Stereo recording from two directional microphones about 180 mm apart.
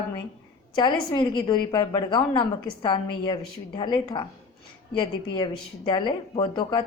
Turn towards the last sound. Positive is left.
turn(degrees=25)  # may be behind; listen again after turning